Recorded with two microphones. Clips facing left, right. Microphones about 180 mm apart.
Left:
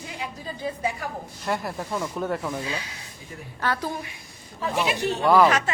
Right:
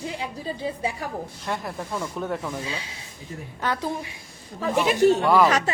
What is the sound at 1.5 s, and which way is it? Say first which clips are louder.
Speech: left 3 dB; 5° left (ahead or behind).